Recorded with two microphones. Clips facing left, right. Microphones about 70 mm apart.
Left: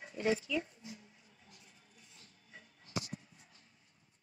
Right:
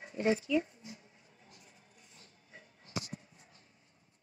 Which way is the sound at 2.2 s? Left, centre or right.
Right.